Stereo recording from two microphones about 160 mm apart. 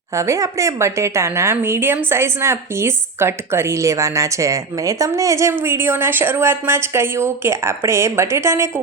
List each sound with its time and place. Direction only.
0.2 s a woman's voice: 20° right (ahead or behind)